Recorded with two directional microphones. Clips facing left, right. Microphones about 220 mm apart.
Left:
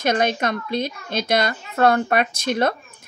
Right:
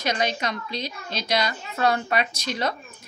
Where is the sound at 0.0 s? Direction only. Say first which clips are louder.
Left 6 dB; 50° left (ahead or behind).